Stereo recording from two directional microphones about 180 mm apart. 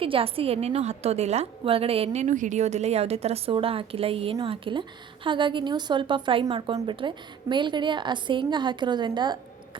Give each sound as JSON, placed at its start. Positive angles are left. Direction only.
{"t": 0.0, "sound": "a woman's voice", "side_deg": -30}